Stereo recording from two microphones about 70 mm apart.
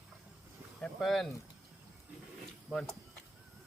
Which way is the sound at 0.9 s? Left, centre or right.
Centre.